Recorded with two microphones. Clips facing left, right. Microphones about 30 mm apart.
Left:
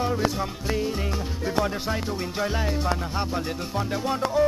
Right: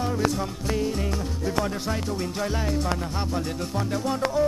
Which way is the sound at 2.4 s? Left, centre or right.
Centre.